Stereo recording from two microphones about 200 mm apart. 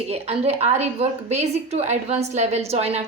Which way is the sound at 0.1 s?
30° right (ahead or behind).